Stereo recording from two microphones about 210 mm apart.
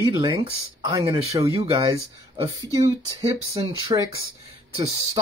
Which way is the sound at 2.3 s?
25° right (ahead or behind).